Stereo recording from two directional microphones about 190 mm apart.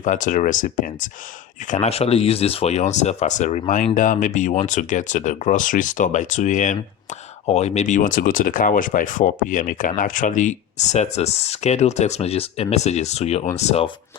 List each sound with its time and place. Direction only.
0.0 s speech: 40° left (ahead or behind)